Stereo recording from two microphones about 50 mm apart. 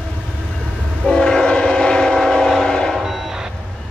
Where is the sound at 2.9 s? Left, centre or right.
Centre.